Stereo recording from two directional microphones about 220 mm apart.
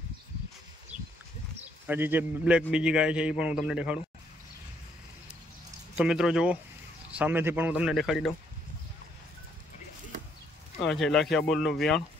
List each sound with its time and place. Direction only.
1.9 s a man's voice: 10° right (ahead or behind)
5.9 s a man's voice: 5° right (ahead or behind)
10.9 s a man's voice: centre (ahead or behind)